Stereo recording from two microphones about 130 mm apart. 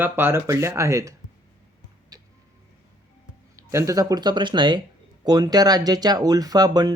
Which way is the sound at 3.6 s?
25° right (ahead or behind).